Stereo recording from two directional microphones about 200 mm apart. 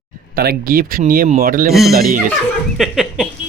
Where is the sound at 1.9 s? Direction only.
45° right (ahead or behind).